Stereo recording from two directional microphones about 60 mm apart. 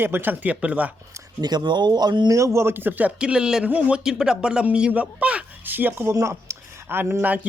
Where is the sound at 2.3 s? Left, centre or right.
Right.